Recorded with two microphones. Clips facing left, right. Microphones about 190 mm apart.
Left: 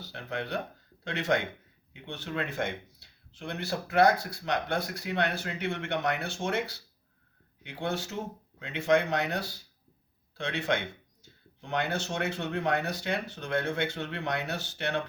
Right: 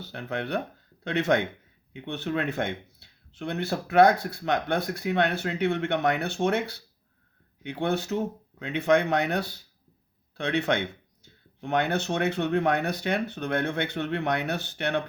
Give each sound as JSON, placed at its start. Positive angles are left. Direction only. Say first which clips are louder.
{"t": 0.0, "sound": "speech", "louder": "right 4 dB", "side_deg": -55}